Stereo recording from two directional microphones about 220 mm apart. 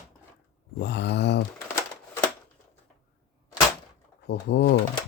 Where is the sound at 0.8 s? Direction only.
50° left (ahead or behind).